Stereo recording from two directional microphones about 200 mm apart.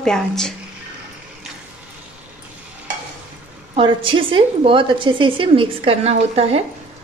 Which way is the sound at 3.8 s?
25° right (ahead or behind).